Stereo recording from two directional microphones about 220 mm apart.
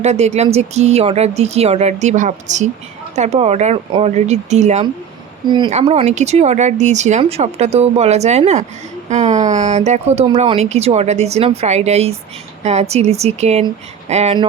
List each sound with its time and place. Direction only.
0.0 s speech: 30° right (ahead or behind)
5.5 s speech: 20° right (ahead or behind)